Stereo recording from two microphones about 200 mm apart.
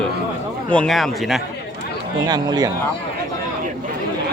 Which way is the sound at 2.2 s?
20° right (ahead or behind).